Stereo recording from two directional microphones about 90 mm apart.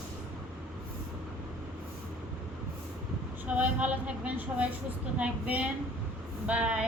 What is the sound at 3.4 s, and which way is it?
A woman's voice, 15° right (ahead or behind).